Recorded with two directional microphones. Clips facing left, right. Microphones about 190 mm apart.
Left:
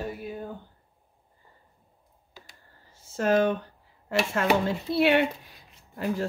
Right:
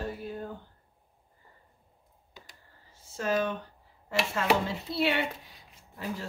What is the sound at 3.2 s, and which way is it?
Speech, 55° left (ahead or behind).